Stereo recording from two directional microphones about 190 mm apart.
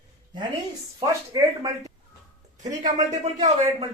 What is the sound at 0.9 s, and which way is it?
Speech, 20° right (ahead or behind).